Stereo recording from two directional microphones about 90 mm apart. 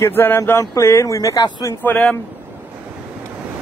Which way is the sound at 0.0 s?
25° left (ahead or behind).